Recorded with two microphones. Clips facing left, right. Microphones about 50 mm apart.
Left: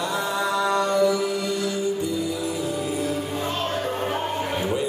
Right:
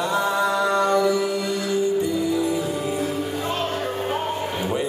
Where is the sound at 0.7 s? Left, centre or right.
Right.